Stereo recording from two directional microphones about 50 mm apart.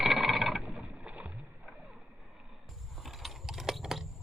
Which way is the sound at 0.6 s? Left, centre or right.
Right.